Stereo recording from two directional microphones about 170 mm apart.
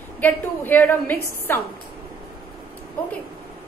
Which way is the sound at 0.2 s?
10° left (ahead or behind).